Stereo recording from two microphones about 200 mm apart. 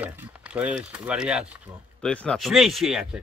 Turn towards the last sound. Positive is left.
turn(degrees=0)  # may be behind; listen again after turning